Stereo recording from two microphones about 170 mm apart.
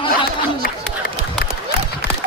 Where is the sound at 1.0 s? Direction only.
55° left (ahead or behind).